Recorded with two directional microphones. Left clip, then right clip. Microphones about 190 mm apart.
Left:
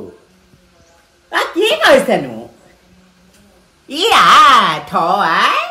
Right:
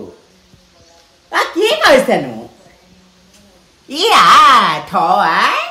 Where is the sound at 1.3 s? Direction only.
5° right (ahead or behind).